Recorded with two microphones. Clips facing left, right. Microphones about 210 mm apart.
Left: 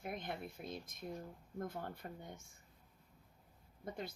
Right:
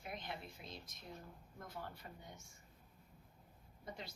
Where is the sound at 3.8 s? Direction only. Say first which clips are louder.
Left 6 dB; 55° left (ahead or behind).